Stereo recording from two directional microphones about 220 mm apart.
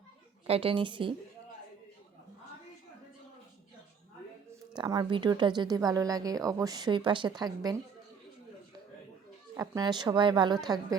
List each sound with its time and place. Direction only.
0.4 s a woman's voice: 25° right (ahead or behind)
4.8 s speech: 20° right (ahead or behind)
9.6 s a woman's voice: 20° right (ahead or behind)